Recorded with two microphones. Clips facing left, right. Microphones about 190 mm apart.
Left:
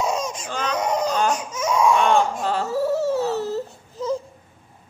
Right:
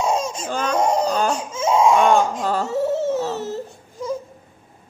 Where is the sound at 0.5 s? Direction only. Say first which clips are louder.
Right 5 dB; 50° right (ahead or behind).